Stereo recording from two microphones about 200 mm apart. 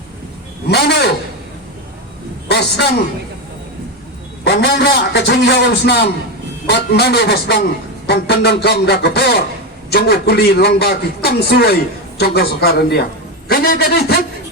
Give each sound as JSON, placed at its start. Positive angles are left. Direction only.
{"t": 0.7, "sound": "a man's voice", "side_deg": 55}
{"t": 2.5, "sound": "a man's voice", "side_deg": 55}
{"t": 4.4, "sound": "a man's voice", "side_deg": 55}